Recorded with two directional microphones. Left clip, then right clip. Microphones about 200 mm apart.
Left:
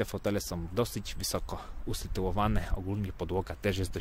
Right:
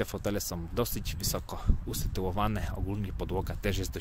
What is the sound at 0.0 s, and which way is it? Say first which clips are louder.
Speech: left 1 dB; 5° left (ahead or behind).